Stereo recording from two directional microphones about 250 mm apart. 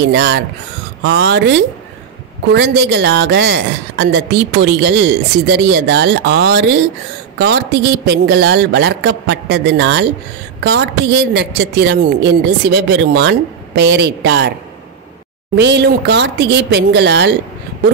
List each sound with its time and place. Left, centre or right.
0.0 s a woman's voice: right
15.5 s a woman's voice: right